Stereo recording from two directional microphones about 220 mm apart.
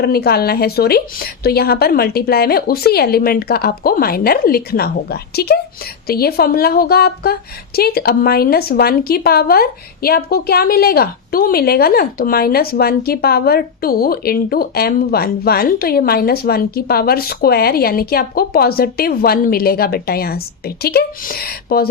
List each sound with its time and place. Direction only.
0.0 s a woman's voice: 45° left (ahead or behind)